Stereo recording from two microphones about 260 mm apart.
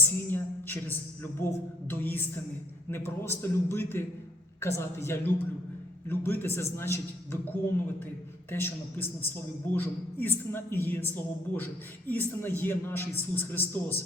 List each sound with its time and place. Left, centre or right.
0.3 s speech: centre